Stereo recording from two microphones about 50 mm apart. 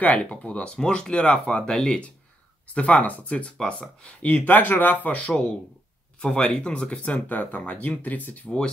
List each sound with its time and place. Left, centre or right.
0.0 s speech: left
4.5 s speech: left
6.2 s speech: centre; by 8.5 s left